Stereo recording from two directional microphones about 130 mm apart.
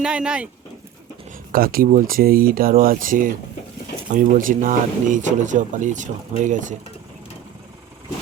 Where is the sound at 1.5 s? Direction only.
90° right; by 6.8 s 75° right (ahead or behind).